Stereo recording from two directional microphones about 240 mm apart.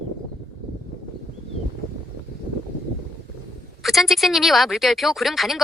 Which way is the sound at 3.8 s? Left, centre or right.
Centre.